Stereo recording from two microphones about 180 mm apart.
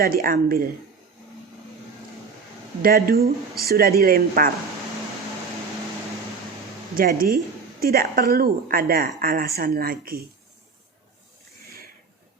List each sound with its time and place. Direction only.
0.0 s a woman's voice: 55° right (ahead or behind)
2.8 s a woman's voice: 55° right (ahead or behind)
6.9 s a woman's voice: 55° right (ahead or behind)